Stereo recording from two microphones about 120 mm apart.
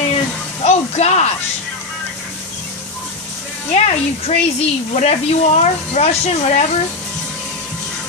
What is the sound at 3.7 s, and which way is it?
Speech, 65° left (ahead or behind).